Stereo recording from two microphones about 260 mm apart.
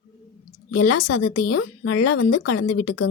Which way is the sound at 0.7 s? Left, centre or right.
Left.